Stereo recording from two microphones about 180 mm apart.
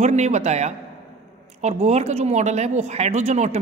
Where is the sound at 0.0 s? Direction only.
40° right (ahead or behind).